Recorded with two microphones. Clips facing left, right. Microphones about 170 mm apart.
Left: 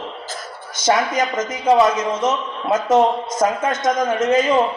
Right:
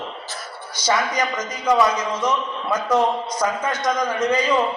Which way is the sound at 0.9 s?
25° left (ahead or behind).